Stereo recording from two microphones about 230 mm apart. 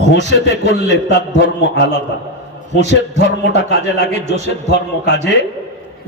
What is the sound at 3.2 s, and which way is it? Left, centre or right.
A man's voice, left.